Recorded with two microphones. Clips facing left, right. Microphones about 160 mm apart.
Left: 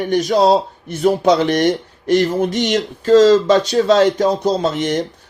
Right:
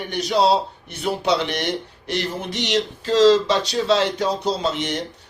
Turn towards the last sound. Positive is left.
turn(degrees=50)  # may be behind; listen again after turning